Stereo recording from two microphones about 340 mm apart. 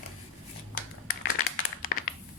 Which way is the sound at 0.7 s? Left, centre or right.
Left.